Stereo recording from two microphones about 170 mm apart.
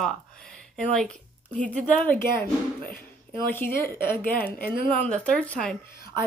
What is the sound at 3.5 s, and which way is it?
A woman's voice, 10° left (ahead or behind).